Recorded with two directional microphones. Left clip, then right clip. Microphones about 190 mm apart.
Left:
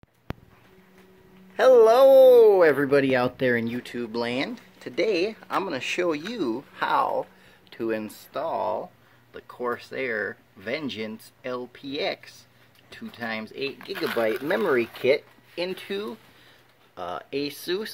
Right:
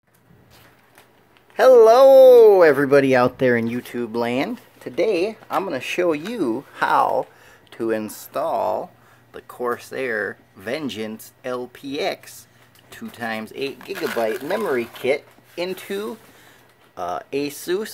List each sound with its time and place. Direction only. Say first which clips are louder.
1.6 s speech: right 5 dB; 5° right (ahead or behind)
4.7 s speech: right 4 dB; centre (ahead or behind)
14.5 s speech: right 1 dB; 25° left (ahead or behind)
15.5 s speech: right 3 dB; centre (ahead or behind)